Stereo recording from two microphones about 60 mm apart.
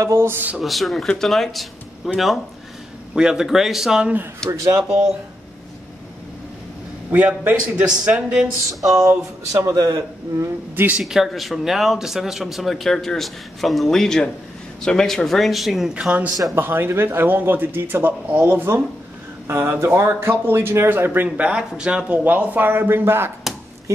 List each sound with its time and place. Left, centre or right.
0.0 s speech: right
0.6 s speech: centre
3.2 s a man's voice: centre
4.5 s speech: right
4.8 s a man's voice: centre
7.6 s a man's voice: centre
8.8 s speech: right
9.7 s a man's voice: right
11.0 s speech: centre
16.1 s a man's voice: right
16.5 s a man's voice: right
21.5 s a man's voice: centre
22.2 s a man's voice: right